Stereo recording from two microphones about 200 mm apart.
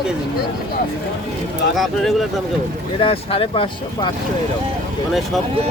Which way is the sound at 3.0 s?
30° left (ahead or behind).